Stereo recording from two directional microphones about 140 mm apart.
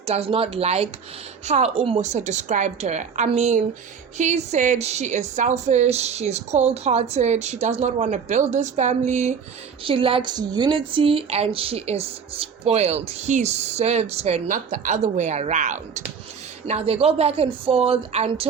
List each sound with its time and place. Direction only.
0.0 s a woman's voice: 45° right (ahead or behind)
9.8 s speech: 40° right (ahead or behind); by 15.8 s 60° right (ahead or behind)
16.6 s speech: 45° right (ahead or behind)